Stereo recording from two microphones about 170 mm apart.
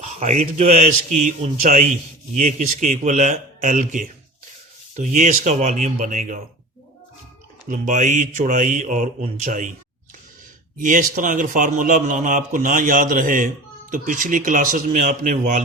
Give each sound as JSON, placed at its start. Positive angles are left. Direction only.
{"t": 0.0, "sound": "a man's voice", "side_deg": -45}
{"t": 7.7, "sound": "a man's voice", "side_deg": -50}
{"t": 10.8, "sound": "a man's voice", "side_deg": -50}